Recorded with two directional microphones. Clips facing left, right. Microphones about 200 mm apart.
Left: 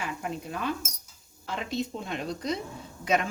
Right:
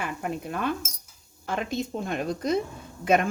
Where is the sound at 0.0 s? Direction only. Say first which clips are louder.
Right 3 dB; 55° right (ahead or behind).